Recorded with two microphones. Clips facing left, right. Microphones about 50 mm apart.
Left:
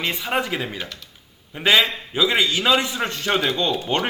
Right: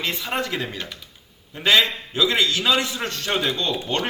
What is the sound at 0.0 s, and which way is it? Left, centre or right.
A man's voice, centre.